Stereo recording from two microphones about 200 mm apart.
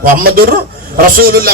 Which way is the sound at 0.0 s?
45° right (ahead or behind).